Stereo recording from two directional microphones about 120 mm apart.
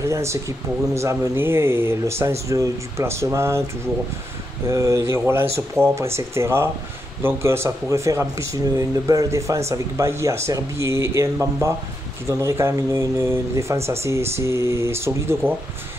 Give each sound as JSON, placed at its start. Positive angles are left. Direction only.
{"t": 0.0, "sound": "speech", "side_deg": -25}
{"t": 4.6, "sound": "speech", "side_deg": -25}